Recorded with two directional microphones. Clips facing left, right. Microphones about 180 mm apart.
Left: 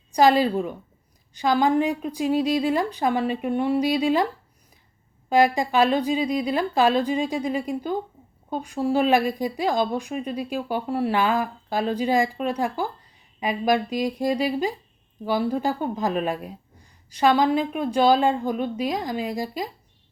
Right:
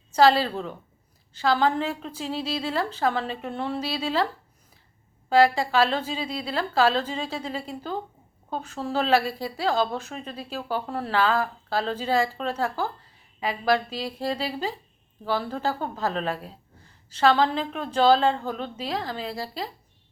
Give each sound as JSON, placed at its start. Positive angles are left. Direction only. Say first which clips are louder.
{"t": 0.1, "sound": "a woman's voice", "louder": "left 2 dB", "side_deg": 15}
{"t": 5.3, "sound": "a woman's voice", "louder": "even", "side_deg": 15}